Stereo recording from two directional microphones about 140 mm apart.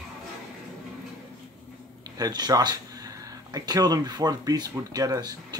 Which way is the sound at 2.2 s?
30° right (ahead or behind).